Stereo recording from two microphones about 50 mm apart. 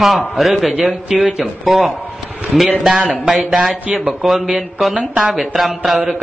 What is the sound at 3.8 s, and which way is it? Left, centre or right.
Speech, right.